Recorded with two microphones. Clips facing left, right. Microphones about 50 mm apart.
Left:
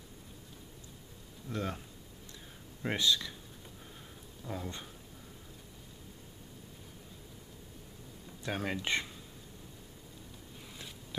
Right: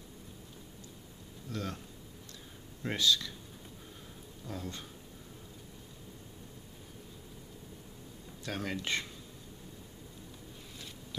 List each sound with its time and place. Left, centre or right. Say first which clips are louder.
1.5 s speech: left 2 dB; left
2.8 s speech: right 1 dB; centre
4.5 s speech: left 1 dB; centre
8.5 s speech: left 2 dB; centre